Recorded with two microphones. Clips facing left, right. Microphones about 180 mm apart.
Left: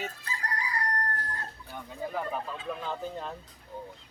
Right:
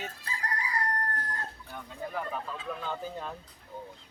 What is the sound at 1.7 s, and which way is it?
Speech, 5° left (ahead or behind).